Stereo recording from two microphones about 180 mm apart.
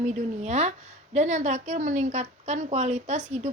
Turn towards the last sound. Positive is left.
turn(degrees=-40)  # may be behind; listen again after turning